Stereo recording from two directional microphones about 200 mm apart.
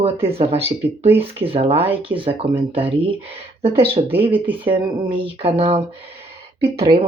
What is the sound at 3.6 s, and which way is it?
Speech, 30° right (ahead or behind).